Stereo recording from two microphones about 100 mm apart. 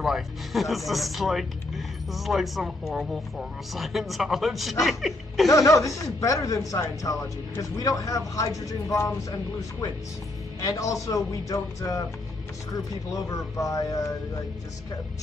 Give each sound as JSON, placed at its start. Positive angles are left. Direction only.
{"t": 0.0, "sound": "speech", "side_deg": 0}
{"t": 5.5, "sound": "speech", "side_deg": 35}
{"t": 10.6, "sound": "speech", "side_deg": 35}